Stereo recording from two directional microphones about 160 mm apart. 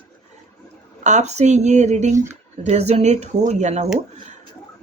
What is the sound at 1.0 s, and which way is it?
Speech, 50° right (ahead or behind).